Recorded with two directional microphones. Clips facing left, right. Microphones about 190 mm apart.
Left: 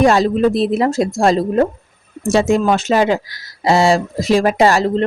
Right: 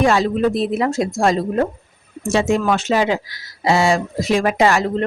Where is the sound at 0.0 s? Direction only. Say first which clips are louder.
Left 3 dB; 40° left (ahead or behind).